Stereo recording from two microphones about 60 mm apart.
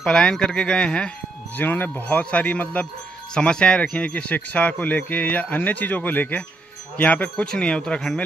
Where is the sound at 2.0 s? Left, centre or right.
Left.